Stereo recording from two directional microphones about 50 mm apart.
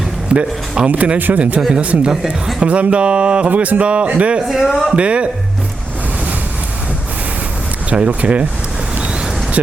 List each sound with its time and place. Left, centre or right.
0.3 s speech: right
4.4 s speech: centre
4.7 s speech: centre
4.9 s speech: right
7.9 s speech: right